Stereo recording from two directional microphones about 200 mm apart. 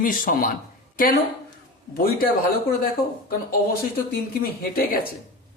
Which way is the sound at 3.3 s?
50° left (ahead or behind).